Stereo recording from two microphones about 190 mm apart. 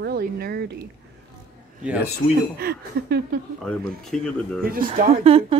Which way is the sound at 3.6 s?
Centre (ahead or behind).